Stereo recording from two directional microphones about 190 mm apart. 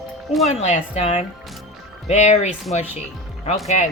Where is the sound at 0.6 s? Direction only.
35° left (ahead or behind).